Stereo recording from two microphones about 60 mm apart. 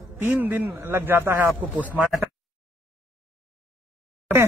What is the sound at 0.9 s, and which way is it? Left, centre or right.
Speech, right.